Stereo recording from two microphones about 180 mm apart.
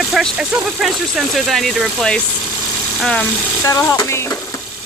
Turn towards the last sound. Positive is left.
turn(degrees=15)  # may be behind; listen again after turning